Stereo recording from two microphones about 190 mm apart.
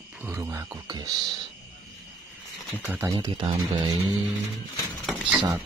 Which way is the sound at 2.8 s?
10° right (ahead or behind).